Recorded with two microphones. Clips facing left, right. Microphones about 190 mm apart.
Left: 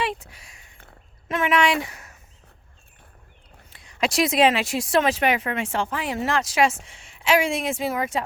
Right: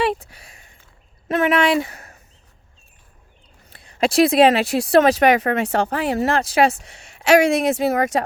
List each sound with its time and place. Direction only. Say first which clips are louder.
0.1 s a sound: right 7 dB; 35° right (ahead or behind)
1.3 s speech: right 4 dB; 35° right (ahead or behind)
3.8 s speech: right 7 dB; 35° right (ahead or behind)
6.8 s a woman's voice: right 6 dB; 70° right (ahead or behind)